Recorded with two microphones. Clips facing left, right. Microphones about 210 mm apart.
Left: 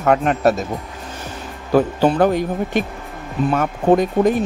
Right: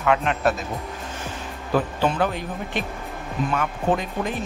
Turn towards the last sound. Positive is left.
turn(degrees=40)  # may be behind; listen again after turning